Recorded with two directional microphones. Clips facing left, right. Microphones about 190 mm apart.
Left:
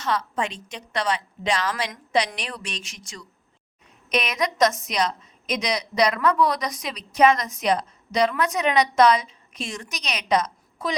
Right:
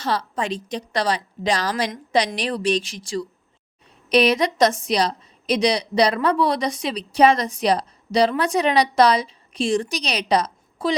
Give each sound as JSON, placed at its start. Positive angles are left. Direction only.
{"t": 0.0, "sound": "a woman's voice", "side_deg": -35}